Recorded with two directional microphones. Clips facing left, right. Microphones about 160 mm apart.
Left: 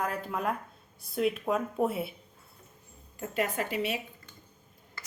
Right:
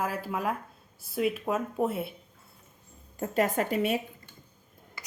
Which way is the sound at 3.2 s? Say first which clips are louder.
Right 4 dB; 40° right (ahead or behind).